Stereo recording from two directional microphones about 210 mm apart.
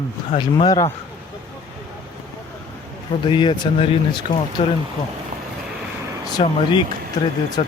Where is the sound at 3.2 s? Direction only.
20° left (ahead or behind).